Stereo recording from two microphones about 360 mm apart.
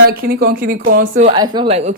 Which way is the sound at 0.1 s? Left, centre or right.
Right.